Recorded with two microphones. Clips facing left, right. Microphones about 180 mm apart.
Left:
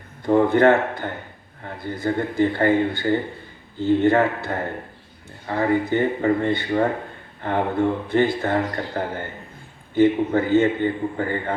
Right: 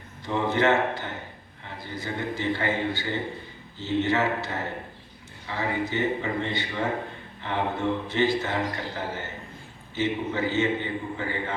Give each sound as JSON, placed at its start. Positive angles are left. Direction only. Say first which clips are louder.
{"t": 0.3, "sound": "speech", "louder": "left 8 dB", "side_deg": 55}